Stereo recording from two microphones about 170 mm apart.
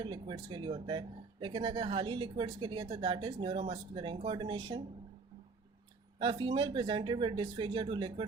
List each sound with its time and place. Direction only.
0.0 s speech: 25° right (ahead or behind)
6.1 s speech: 30° right (ahead or behind)